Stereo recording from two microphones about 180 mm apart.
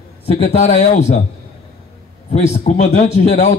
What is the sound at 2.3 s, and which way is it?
A man's voice, 40° left (ahead or behind).